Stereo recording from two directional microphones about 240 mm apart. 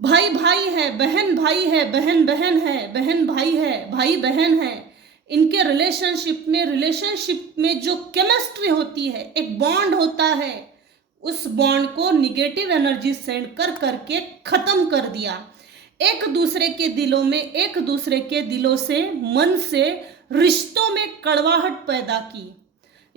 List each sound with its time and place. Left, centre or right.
0.0 s a woman's voice: right